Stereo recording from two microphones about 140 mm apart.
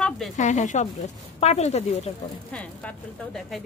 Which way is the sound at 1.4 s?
50° left (ahead or behind).